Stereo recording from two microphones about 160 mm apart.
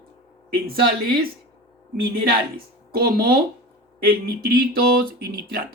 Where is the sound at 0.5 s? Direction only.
70° right (ahead or behind).